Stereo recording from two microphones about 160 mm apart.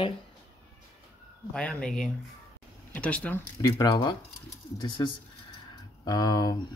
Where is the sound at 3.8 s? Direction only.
25° left (ahead or behind).